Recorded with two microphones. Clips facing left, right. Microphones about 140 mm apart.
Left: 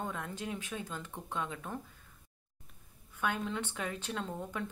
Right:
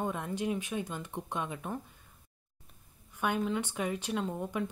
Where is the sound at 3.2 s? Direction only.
15° right (ahead or behind).